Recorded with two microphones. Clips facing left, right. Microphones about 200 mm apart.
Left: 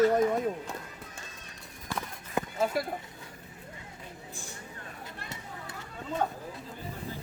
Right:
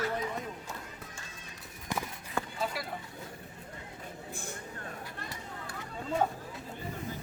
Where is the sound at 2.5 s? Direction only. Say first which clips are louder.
Left 10 dB; 50° left (ahead or behind).